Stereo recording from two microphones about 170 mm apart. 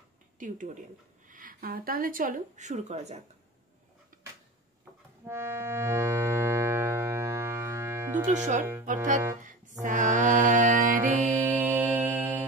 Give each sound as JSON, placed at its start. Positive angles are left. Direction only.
{"t": 0.4, "sound": "speech", "side_deg": -50}
{"t": 4.1, "sound": "a sound", "side_deg": -55}
{"t": 5.2, "sound": "accordion", "side_deg": -15}
{"t": 8.3, "sound": "speech", "side_deg": -45}
{"t": 8.8, "sound": "music", "side_deg": -50}
{"t": 11.4, "sound": "music", "side_deg": -10}